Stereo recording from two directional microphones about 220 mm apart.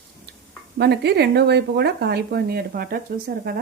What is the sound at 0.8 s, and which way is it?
Speech, 50° right (ahead or behind).